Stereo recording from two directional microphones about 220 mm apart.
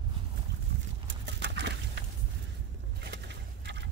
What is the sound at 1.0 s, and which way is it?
Horse, 50° right (ahead or behind).